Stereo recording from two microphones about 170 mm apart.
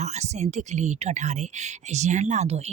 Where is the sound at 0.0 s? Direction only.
40° right (ahead or behind).